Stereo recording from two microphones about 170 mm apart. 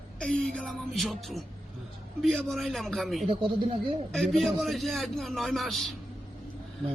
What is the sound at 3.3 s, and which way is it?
Speech, 30° right (ahead or behind).